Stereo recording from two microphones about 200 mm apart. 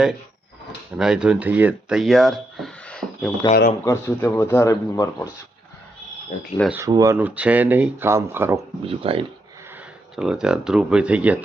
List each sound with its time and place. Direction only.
0.9 s speech: 5° right (ahead or behind)
3.5 s speech: 50° left (ahead or behind)
3.8 s speech: 15° left (ahead or behind)
6.7 s speech: 15° right (ahead or behind)
8.9 s speech: 30° right (ahead or behind)
10.2 s speech: 5° right (ahead or behind)